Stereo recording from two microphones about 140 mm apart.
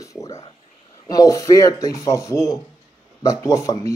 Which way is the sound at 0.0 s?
20° left (ahead or behind).